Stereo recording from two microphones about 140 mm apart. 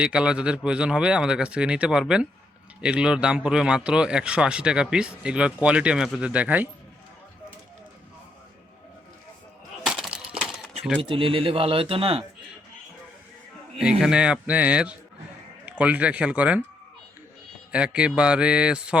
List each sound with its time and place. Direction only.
0.0 s a man's voice: 5° right (ahead or behind)
9.8 s breaking: 5° right (ahead or behind)
11.0 s speech: 40° right (ahead or behind)
14.0 s a man's voice: 5° right (ahead or behind)
17.7 s a man's voice: 10° right (ahead or behind)